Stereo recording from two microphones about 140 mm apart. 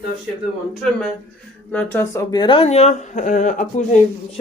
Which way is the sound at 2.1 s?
30° left (ahead or behind).